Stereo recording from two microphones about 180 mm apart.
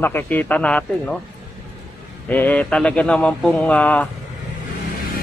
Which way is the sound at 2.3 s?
10° left (ahead or behind).